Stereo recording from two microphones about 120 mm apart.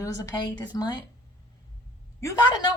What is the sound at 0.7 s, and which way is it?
Speech, 35° left (ahead or behind).